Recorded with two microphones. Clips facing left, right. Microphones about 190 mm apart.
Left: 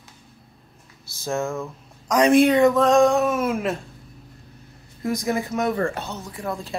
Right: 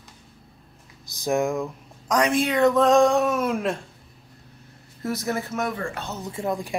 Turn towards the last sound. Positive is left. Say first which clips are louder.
# right 3 dB
turn(degrees=-20)  # may be behind; listen again after turning